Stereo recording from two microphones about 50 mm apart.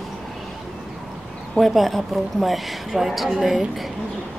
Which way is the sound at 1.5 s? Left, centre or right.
Centre.